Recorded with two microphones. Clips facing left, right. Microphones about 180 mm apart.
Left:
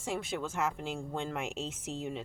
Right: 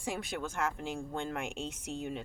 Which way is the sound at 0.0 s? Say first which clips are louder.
Left 2 dB; centre (ahead or behind).